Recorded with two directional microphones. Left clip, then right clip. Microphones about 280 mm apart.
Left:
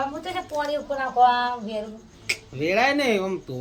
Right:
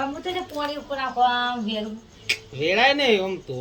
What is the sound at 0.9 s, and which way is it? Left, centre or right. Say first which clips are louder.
Speech: left 2 dB; left.